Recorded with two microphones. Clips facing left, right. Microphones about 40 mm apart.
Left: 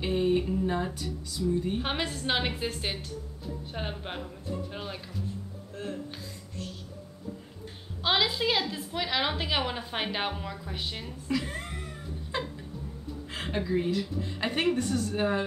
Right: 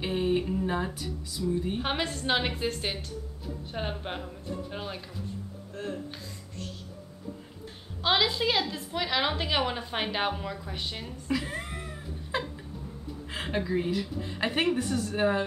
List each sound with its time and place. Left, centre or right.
0.0 s a woman's voice: centre
8.0 s a woman's voice: centre